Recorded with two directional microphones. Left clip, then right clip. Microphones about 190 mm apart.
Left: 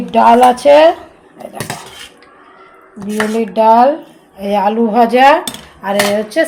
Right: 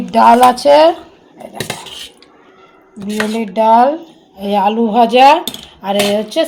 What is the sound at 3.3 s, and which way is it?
A woman's voice, centre (ahead or behind).